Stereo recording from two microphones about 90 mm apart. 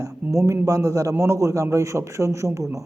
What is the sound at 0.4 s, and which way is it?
Speech, 35° right (ahead or behind).